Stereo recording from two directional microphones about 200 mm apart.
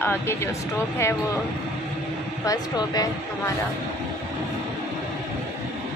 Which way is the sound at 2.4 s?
20° left (ahead or behind).